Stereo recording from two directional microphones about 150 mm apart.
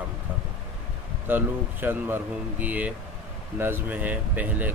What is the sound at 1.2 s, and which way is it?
Speech, 15° right (ahead or behind).